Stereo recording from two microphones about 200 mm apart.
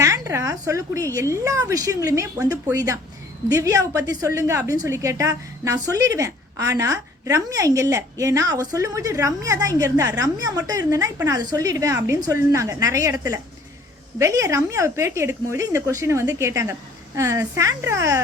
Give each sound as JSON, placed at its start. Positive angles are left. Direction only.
{"t": 0.0, "sound": "a woman's voice", "side_deg": -15}